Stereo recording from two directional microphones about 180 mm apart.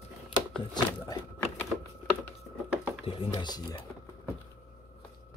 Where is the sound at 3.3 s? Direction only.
25° left (ahead or behind).